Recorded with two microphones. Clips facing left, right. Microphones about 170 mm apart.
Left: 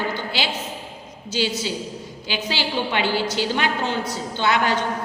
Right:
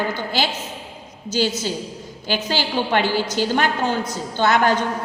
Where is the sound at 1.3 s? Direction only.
45° right (ahead or behind).